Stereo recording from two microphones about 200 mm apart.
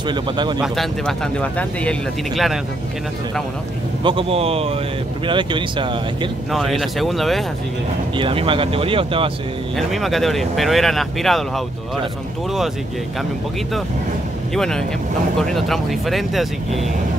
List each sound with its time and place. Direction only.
0.1 s speech: 20° right (ahead or behind)
0.6 s speech: centre (ahead or behind)
4.0 s speech: 25° right (ahead or behind)
6.5 s speech: centre (ahead or behind)
8.2 s speech: 25° right (ahead or behind)
9.8 s speech: centre (ahead or behind)
14.5 s speech: centre (ahead or behind)